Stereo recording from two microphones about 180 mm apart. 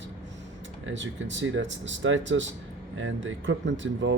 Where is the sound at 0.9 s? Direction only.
90° right.